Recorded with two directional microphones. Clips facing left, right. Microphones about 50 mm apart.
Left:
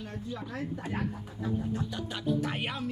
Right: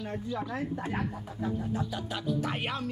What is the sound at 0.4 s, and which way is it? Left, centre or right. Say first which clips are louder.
Speech: right 3 dB; right.